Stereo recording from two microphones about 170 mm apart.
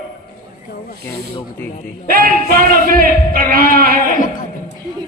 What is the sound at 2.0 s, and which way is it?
A man's voice, 60° right (ahead or behind).